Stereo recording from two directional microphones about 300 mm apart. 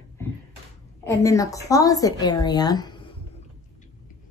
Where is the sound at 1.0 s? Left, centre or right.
Centre.